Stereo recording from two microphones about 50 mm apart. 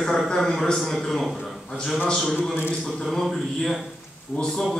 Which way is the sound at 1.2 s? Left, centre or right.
Centre.